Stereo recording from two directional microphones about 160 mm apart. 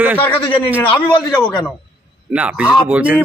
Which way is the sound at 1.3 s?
5° left (ahead or behind).